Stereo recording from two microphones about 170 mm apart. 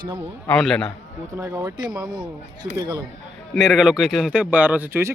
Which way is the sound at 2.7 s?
25° right (ahead or behind).